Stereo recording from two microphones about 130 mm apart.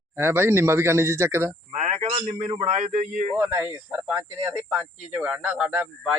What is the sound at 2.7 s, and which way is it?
Speech, 70° right (ahead or behind).